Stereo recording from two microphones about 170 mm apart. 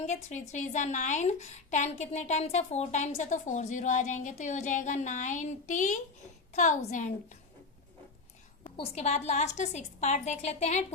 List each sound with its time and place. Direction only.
0.0 s a woman's voice: 45° left (ahead or behind)
8.6 s a woman's voice: 35° left (ahead or behind)